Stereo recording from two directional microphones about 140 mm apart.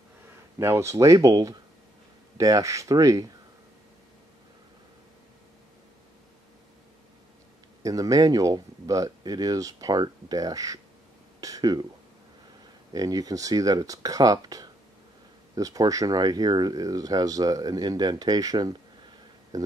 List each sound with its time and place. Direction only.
0.6 s speech: 20° right (ahead or behind)
7.8 s speech: 25° right (ahead or behind)
12.9 s speech: 25° right (ahead or behind)